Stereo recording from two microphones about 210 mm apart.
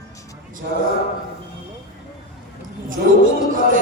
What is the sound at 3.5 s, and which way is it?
Music, 40° right (ahead or behind).